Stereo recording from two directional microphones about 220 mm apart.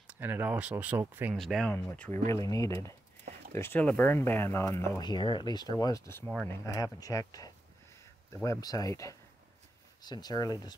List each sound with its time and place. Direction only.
0.0 s speech: 10° right (ahead or behind)
1.4 s speech: centre (ahead or behind); by 10.7 s 20° left (ahead or behind)